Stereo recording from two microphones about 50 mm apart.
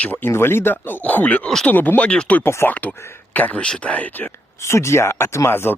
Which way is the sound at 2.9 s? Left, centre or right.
Left.